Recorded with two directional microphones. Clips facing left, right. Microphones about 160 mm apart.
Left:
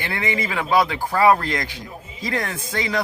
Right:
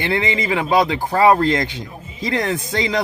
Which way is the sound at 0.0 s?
20° right (ahead or behind).